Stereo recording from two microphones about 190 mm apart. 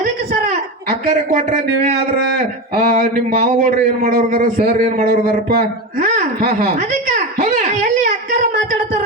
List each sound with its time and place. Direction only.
0.9 s a man's voice: 45° right (ahead or behind)
7.7 s whimper: 45° right (ahead or behind)